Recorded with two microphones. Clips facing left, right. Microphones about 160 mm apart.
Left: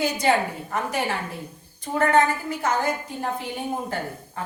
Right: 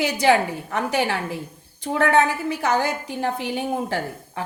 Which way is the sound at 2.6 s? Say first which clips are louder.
Right 2 dB; 75° right (ahead or behind).